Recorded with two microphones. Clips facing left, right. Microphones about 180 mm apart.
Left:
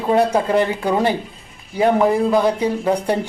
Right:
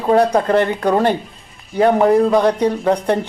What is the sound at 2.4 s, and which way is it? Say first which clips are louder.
Speech: right 3 dB; 10° left (ahead or behind).